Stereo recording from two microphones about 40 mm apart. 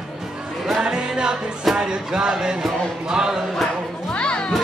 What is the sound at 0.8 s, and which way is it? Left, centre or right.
Music, centre.